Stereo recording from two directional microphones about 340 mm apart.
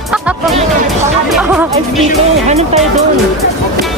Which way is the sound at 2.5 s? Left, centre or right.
Centre.